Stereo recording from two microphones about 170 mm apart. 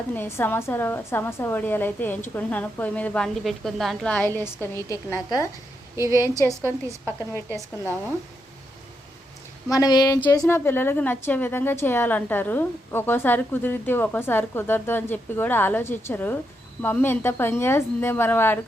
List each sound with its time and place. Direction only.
0.1 s a woman's voice: 15° left (ahead or behind)
6.0 s a woman's voice: 15° right (ahead or behind)
9.6 s speech: 20° left (ahead or behind)
10.4 s a woman's voice: 15° left (ahead or behind)